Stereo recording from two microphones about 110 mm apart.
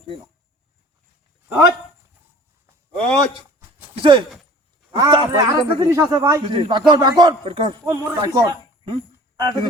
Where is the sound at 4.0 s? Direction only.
55° right (ahead or behind).